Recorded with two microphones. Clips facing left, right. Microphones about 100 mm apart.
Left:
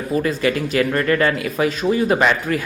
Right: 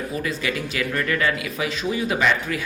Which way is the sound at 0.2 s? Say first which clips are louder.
Left 8 dB; 45° left (ahead or behind).